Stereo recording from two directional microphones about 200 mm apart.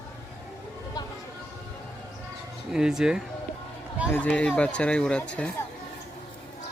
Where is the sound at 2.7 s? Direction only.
5° right (ahead or behind).